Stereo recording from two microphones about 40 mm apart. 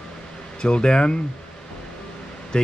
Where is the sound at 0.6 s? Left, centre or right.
Left.